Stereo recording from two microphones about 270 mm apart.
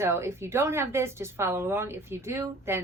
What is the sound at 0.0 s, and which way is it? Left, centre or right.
A woman's voice, centre.